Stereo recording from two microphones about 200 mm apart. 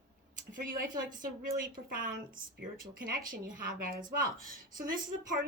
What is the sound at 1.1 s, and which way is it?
A woman's voice, 45° right (ahead or behind).